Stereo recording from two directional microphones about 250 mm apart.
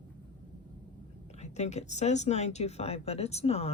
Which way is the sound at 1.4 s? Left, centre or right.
Left.